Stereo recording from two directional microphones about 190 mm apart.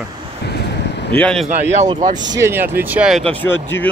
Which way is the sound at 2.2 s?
20° right (ahead or behind).